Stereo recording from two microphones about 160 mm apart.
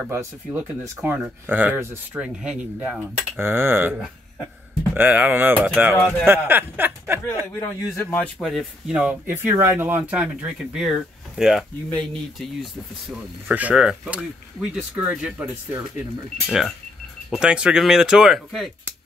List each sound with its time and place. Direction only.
0.1 s speech: 15° right (ahead or behind)
4.9 s speech: 10° right (ahead or behind)
7.5 s speech: 15° left (ahead or behind); by 18.7 s centre (ahead or behind)